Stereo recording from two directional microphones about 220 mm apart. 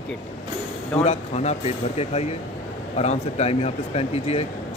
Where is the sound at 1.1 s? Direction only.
30° left (ahead or behind).